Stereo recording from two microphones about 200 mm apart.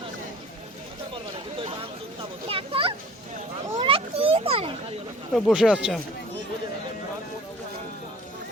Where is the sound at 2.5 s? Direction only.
25° right (ahead or behind).